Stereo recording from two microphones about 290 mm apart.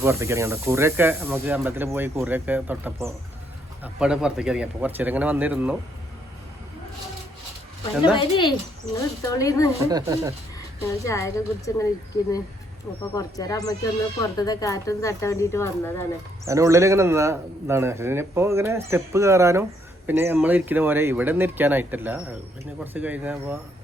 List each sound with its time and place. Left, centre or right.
0.0 s a man's voice: centre
8.1 s speech: centre
9.8 s a man's voice: centre
10.8 s speech: centre
13.1 s speech: centre
16.5 s a man's voice: centre